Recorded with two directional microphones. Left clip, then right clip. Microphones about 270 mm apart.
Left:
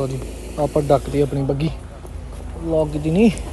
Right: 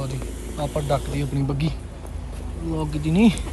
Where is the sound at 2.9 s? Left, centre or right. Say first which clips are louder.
Left 4 dB; centre.